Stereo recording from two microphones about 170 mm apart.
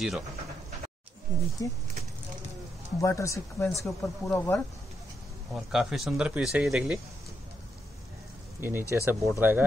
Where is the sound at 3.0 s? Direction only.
15° left (ahead or behind).